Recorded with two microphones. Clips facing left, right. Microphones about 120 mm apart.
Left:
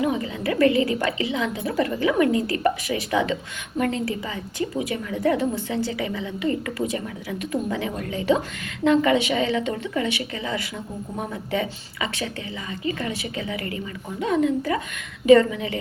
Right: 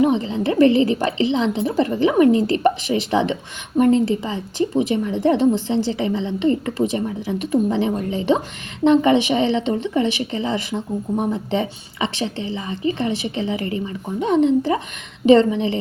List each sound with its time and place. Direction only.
0.0 s a woman's voice: 30° right (ahead or behind)